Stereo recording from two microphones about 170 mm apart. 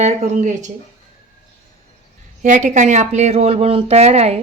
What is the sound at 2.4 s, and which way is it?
Speech, 45° right (ahead or behind).